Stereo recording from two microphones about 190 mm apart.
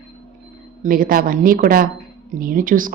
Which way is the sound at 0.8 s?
45° right (ahead or behind).